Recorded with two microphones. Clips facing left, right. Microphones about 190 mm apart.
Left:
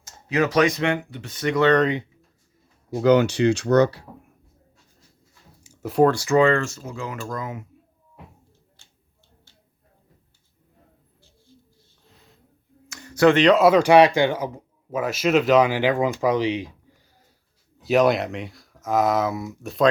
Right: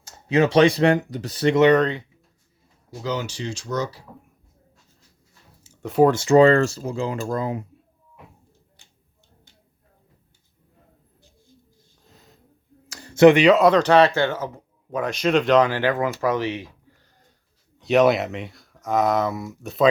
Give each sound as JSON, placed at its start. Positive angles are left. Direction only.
{"t": 0.0, "sound": "speech", "side_deg": -30}
{"t": 2.9, "sound": "speech", "side_deg": 60}
{"t": 5.6, "sound": "a sound", "side_deg": 10}
{"t": 6.1, "sound": "speech", "side_deg": -25}
{"t": 12.1, "sound": "a sound", "side_deg": -40}
{"t": 13.2, "sound": "speech", "side_deg": -10}
{"t": 13.6, "sound": "speech", "side_deg": 10}
{"t": 17.7, "sound": "speech", "side_deg": 0}